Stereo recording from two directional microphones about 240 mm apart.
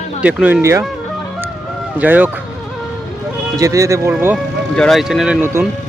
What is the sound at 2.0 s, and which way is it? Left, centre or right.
Speech, centre.